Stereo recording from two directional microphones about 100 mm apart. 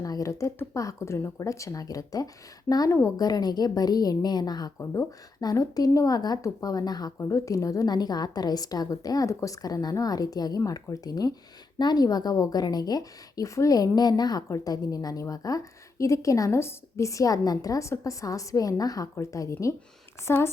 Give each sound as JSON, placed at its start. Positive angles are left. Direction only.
{"t": 0.0, "sound": "a woman's voice", "side_deg": 35}
{"t": 7.2, "sound": "a woman's voice", "side_deg": 30}